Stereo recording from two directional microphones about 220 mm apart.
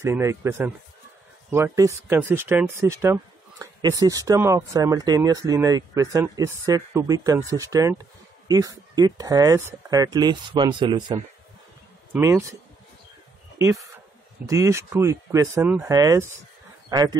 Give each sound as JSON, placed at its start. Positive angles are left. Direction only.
{"t": 0.0, "sound": "speech", "side_deg": -15}
{"t": 13.6, "sound": "speech", "side_deg": -15}